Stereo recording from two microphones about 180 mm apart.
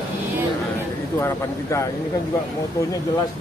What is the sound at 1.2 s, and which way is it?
Speech, 15° left (ahead or behind).